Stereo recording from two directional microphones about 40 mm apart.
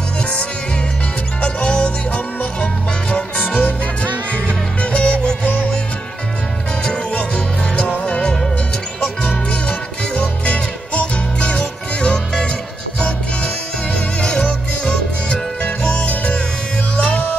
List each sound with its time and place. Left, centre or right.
1.4 s music: left
6.8 s music: left
7.3 s music: left
9.5 s music: left
14.2 s music: left
16.0 s music: left